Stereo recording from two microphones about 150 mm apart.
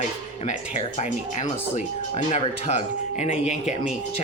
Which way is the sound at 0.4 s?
50° left (ahead or behind).